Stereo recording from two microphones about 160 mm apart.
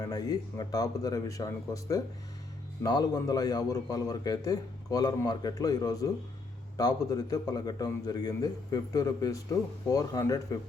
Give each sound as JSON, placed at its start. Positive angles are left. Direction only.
{"t": 0.0, "sound": "a man's voice", "side_deg": 25}